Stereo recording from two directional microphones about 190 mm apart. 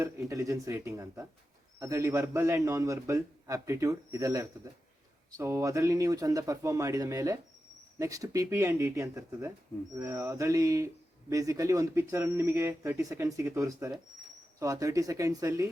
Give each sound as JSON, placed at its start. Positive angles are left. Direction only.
{"t": 0.0, "sound": "a man's voice", "side_deg": -15}